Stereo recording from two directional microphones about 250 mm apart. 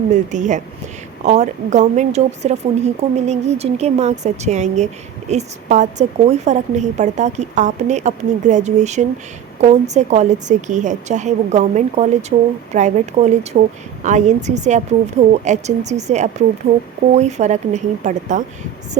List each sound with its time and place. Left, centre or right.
0.1 s a woman's voice: right